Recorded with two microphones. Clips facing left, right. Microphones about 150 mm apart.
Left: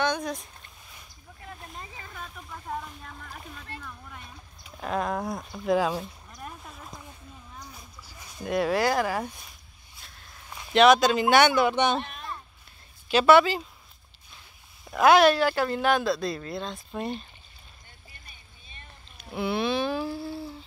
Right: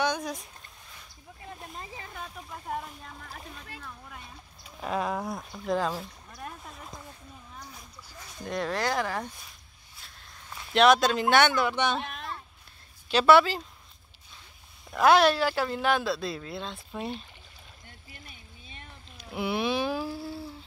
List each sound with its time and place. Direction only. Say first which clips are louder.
0.0 s a sound: left 1 dB; 10° right (ahead or behind)
2.1 s speech: left 1 dB; 10° right (ahead or behind)
3.7 s speech: left 7 dB; 90° right
4.7 s speech: left 1 dB; centre (ahead or behind)
6.4 s a sound: even; centre (ahead or behind)
8.2 s speech: left 5 dB; 10° left (ahead or behind)
10.7 s speech: left 3 dB; centre (ahead or behind); by 12.0 s 20° left (ahead or behind)
13.1 s speech: left 2 dB; centre (ahead or behind)
14.9 s speech: left 2 dB; centre (ahead or behind)
17.8 s boat: right 6 dB; 90° right
19.3 s a sound: left 2 dB; 10° right (ahead or behind)